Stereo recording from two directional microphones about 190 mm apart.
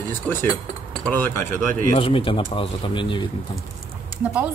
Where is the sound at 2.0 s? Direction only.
30° left (ahead or behind).